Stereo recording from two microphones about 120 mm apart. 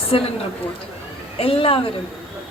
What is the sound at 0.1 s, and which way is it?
Speech, 55° left (ahead or behind).